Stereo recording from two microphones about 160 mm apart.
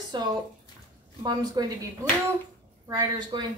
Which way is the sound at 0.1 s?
30° right (ahead or behind).